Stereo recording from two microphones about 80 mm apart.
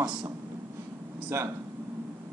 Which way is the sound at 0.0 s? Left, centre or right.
Centre.